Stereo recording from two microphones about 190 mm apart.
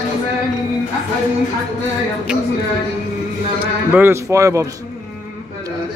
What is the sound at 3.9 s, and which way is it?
Speech, 15° right (ahead or behind).